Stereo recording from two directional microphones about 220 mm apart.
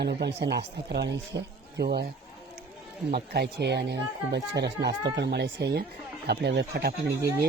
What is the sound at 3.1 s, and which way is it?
Speech, 45° right (ahead or behind).